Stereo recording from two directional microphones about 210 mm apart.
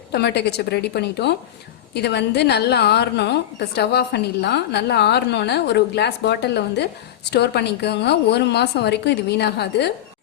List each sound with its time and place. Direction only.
0.1 s a woman's voice: 50° left (ahead or behind)